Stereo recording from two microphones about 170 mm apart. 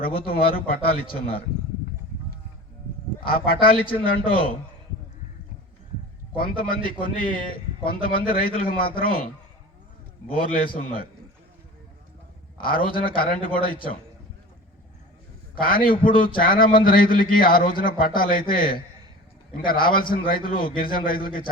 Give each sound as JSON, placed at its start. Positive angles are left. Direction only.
{"t": 0.0, "sound": "a man's voice", "side_deg": 60}
{"t": 3.2, "sound": "a man's voice", "side_deg": 60}
{"t": 6.3, "sound": "a man's voice", "side_deg": 60}
{"t": 10.3, "sound": "a man's voice", "side_deg": 60}
{"t": 12.6, "sound": "a man's voice", "side_deg": 60}
{"t": 15.6, "sound": "a man's voice", "side_deg": 55}
{"t": 19.8, "sound": "a man's voice", "side_deg": 55}